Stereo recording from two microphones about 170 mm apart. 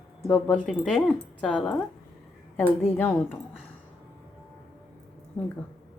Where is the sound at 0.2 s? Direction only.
5° left (ahead or behind).